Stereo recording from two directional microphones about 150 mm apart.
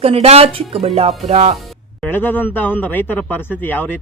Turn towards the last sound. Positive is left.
turn(degrees=10)  # may be behind; listen again after turning